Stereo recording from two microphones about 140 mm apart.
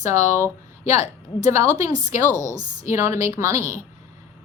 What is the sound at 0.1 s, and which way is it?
Speech, 20° right (ahead or behind).